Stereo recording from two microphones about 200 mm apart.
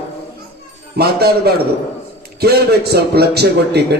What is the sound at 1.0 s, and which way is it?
A man's voice, 55° right (ahead or behind).